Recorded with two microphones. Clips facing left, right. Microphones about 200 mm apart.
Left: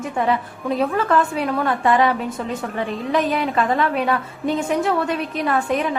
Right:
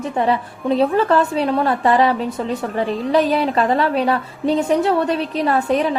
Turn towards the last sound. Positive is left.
turn(degrees=-30)  # may be behind; listen again after turning